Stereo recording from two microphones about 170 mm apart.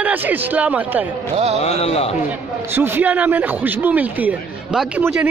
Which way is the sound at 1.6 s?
35° left (ahead or behind).